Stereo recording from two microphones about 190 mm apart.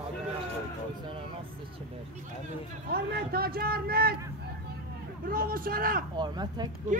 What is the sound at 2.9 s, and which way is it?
Speech, 55° right (ahead or behind).